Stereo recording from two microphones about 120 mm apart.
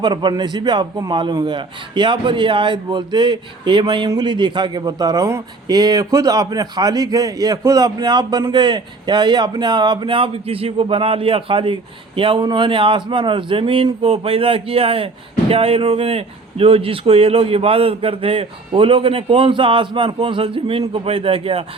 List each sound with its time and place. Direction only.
0.0 s a man's voice: 40° right (ahead or behind)